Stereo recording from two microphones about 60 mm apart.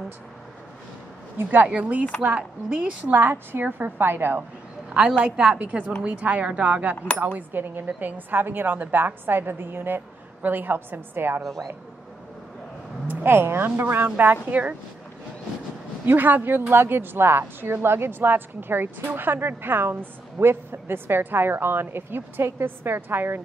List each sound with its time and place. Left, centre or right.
1.7 s a woman's voice: right
4.8 s a sound: centre
5.2 s a woman's voice: centre
5.6 s a woman's voice: right
13.0 s a woman's voice: right
16.1 s a woman's voice: right